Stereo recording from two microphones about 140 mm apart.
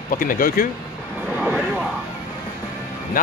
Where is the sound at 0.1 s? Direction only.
85° left.